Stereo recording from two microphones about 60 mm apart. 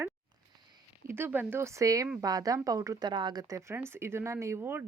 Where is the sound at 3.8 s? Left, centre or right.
Right.